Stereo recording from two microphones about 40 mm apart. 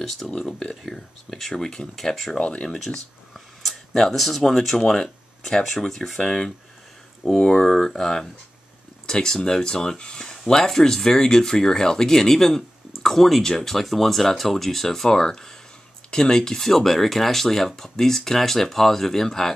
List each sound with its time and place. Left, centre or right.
0.0 s speech: centre
2.3 s speech: left
2.7 s speech: centre